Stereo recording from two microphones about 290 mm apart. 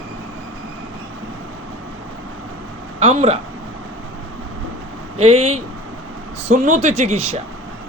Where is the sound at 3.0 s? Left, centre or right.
Right.